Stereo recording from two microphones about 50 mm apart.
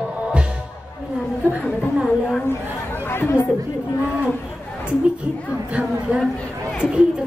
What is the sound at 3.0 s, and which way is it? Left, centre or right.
Chatter, left.